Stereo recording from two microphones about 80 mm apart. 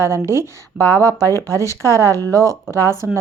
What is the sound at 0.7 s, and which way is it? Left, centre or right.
Speech, right.